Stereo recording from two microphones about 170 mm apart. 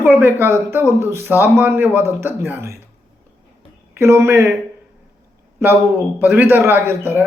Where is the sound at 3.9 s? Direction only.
15° right (ahead or behind).